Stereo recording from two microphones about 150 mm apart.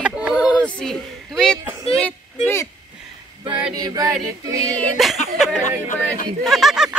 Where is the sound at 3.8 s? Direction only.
25° right (ahead or behind).